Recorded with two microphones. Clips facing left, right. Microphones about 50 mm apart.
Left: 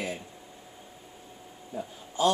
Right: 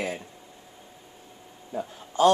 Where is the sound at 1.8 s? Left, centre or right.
Right.